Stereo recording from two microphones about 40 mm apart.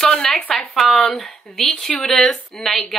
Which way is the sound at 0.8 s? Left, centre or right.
Left.